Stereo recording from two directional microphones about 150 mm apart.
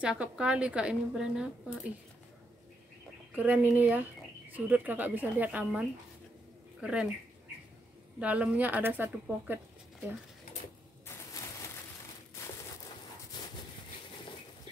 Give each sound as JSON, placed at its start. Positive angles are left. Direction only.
{"t": 0.0, "sound": "speech", "side_deg": -5}
{"t": 3.3, "sound": "speech", "side_deg": -10}
{"t": 8.2, "sound": "speech", "side_deg": -10}
{"t": 13.3, "sound": "a sound", "side_deg": 25}